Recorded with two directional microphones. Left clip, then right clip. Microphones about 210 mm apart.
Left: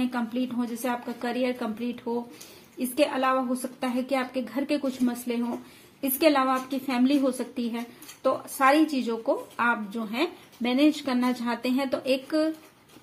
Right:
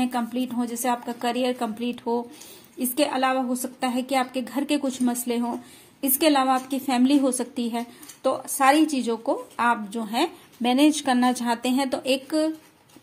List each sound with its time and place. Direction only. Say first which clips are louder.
0.0 s a woman's voice: right 3 dB; 30° right (ahead or behind)